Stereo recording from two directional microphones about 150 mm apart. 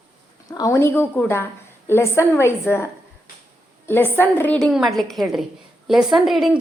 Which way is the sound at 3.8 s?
15° left (ahead or behind).